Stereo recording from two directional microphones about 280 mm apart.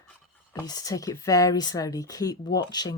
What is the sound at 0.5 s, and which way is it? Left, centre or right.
Speech, centre.